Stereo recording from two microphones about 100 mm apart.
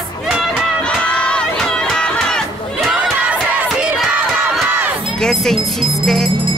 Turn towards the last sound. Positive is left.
turn(degrees=0)  # may be behind; listen again after turning